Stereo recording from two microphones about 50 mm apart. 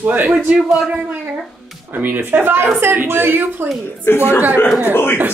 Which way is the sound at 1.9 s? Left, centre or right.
Right.